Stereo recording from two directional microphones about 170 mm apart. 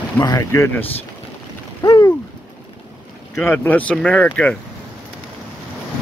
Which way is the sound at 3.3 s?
15° left (ahead or behind).